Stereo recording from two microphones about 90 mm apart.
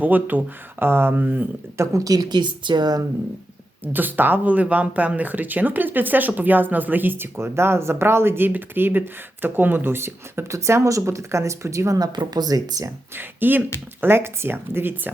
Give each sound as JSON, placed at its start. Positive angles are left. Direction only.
{"t": 0.0, "sound": "speech", "side_deg": -20}
{"t": 1.8, "sound": "speech", "side_deg": -35}
{"t": 3.9, "sound": "speech", "side_deg": -20}
{"t": 13.1, "sound": "speech", "side_deg": -20}